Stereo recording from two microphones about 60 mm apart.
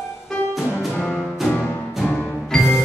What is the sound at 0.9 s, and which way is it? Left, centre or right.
Music, centre.